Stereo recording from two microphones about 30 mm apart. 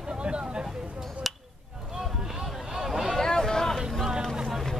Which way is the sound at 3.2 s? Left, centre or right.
Centre.